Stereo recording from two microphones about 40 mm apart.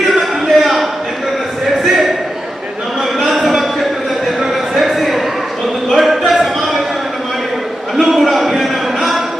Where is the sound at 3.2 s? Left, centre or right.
Centre.